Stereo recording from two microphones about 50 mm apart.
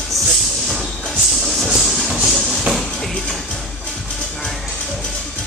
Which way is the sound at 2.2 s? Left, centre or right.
Centre.